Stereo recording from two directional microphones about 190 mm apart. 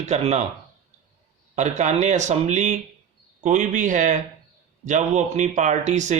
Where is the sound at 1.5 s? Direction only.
40° right (ahead or behind).